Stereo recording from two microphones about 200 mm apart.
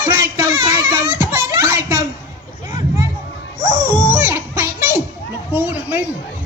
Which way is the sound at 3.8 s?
10° right (ahead or behind).